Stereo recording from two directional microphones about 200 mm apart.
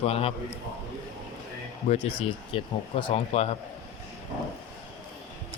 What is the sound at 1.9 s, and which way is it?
Speech, 30° left (ahead or behind).